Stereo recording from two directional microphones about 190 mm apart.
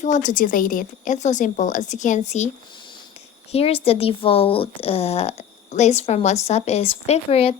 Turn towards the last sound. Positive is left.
turn(degrees=30)  # may be behind; listen again after turning